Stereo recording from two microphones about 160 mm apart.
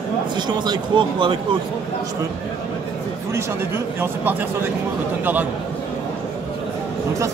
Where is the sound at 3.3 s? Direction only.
15° right (ahead or behind).